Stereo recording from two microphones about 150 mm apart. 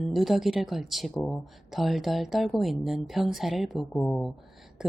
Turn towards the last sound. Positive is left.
turn(degrees=10)  # may be behind; listen again after turning